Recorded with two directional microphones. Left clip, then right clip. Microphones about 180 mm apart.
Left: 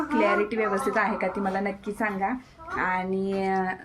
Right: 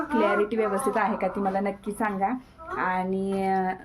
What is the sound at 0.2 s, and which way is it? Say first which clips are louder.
Speech: even; 5° right (ahead or behind).